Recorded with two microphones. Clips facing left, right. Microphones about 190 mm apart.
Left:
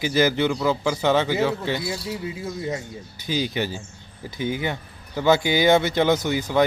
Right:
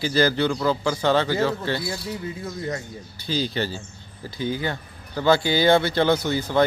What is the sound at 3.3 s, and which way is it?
Speech, 15° left (ahead or behind).